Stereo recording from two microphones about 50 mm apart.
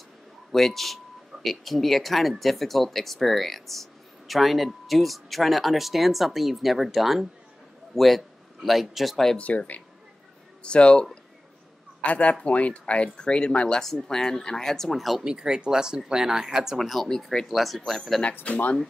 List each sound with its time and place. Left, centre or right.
0.5 s a man's voice: centre
9.4 s speech: left
13.8 s speech: centre
15.2 s speech: centre
18.4 s speech: left